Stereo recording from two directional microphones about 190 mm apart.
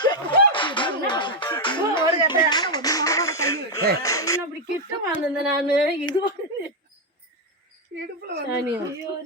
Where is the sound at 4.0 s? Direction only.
15° left (ahead or behind).